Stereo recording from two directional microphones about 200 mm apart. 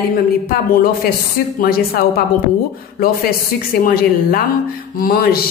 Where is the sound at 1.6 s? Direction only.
50° left (ahead or behind).